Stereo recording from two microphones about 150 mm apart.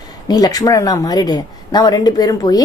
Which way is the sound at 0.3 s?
25° left (ahead or behind).